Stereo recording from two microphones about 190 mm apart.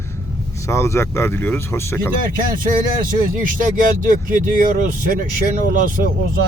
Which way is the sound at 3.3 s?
45° right (ahead or behind).